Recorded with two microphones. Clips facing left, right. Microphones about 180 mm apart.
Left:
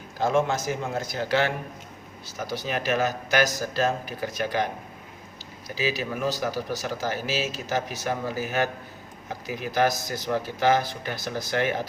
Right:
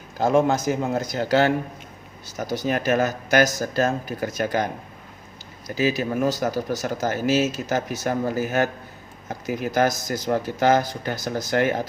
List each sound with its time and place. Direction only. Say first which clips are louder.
0.2 s a man's voice: right 4 dB; 40° right (ahead or behind)
9.6 s speech: right 2 dB; 45° right (ahead or behind)